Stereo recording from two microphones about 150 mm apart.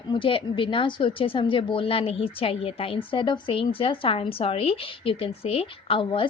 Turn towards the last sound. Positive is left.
turn(degrees=35)  # may be behind; listen again after turning